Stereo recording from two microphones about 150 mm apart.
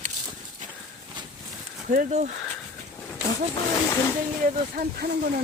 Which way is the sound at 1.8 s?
60° right (ahead or behind).